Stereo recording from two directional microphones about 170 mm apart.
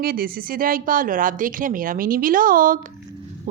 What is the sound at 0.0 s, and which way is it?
A woman's voice, 60° right (ahead or behind).